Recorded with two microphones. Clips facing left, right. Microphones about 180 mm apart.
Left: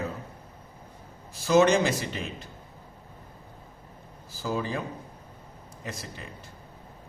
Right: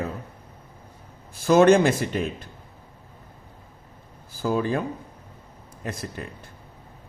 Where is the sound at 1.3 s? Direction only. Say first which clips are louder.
Right 5 dB; 55° right (ahead or behind).